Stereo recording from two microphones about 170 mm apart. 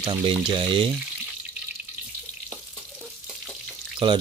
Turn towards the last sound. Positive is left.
turn(degrees=-30)  # may be behind; listen again after turning